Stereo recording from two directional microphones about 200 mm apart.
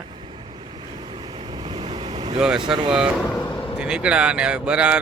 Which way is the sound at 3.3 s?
20° left (ahead or behind).